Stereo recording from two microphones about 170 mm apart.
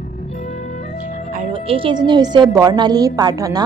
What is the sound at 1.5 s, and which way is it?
A woman's voice, 30° right (ahead or behind).